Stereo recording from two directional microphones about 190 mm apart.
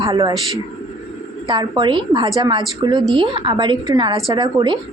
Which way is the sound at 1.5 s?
25° right (ahead or behind).